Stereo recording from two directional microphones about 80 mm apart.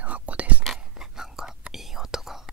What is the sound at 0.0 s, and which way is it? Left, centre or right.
Whispering, centre.